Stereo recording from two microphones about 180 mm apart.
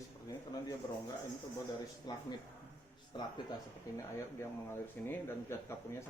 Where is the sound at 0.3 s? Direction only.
20° left (ahead or behind).